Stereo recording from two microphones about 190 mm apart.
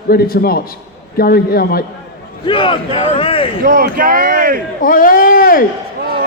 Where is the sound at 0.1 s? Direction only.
55° left (ahead or behind).